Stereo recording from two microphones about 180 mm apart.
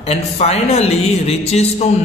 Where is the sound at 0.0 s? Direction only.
35° left (ahead or behind).